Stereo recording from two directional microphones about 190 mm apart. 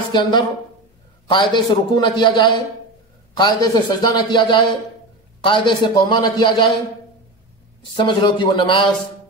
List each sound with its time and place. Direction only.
0.1 s a man's voice: 25° left (ahead or behind)
7.9 s a man's voice: 25° left (ahead or behind)